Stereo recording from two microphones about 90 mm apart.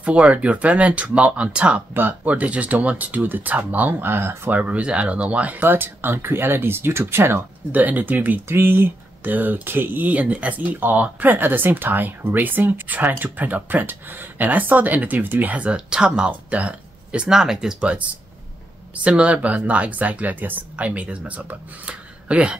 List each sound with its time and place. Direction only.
0.0 s speech: 15° right (ahead or behind)
4.6 s speech: 15° right (ahead or behind)
19.0 s speech: 15° right (ahead or behind)